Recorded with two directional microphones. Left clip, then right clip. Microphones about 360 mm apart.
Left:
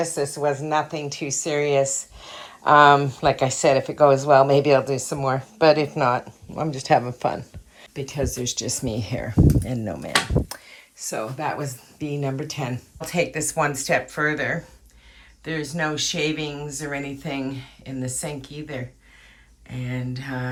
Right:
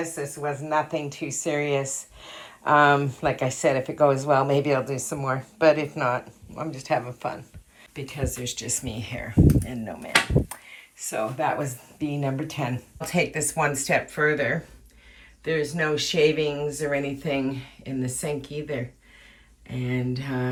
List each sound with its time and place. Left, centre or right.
0.0 s a woman's voice: centre
8.8 s speech: left
9.6 s speech: left
11.1 s a woman's voice: centre